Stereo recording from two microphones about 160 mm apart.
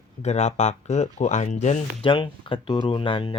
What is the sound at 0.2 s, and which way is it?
Speech, 45° left (ahead or behind).